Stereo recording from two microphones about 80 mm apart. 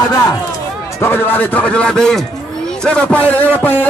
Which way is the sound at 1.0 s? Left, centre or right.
Left.